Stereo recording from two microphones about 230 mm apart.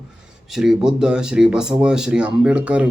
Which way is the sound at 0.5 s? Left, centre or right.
Centre.